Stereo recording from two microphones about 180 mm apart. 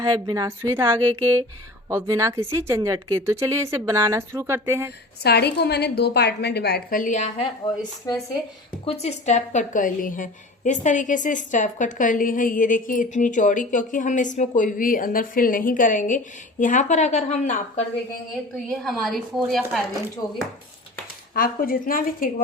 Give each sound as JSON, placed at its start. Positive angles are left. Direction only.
{"t": 0.0, "sound": "speech", "side_deg": -20}
{"t": 5.2, "sound": "a woman's voice", "side_deg": 65}
{"t": 8.8, "sound": "a woman's voice", "side_deg": 35}
{"t": 18.7, "sound": "a woman's voice", "side_deg": 0}
{"t": 20.2, "sound": "speech", "side_deg": 20}
{"t": 21.3, "sound": "a woman's voice", "side_deg": 50}